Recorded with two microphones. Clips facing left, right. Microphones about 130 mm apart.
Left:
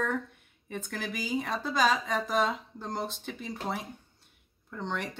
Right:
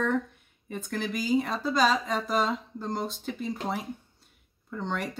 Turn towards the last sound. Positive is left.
turn(degrees=0)  # may be behind; listen again after turning